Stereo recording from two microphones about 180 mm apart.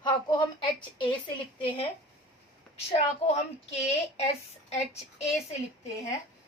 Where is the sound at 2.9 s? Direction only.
35° left (ahead or behind).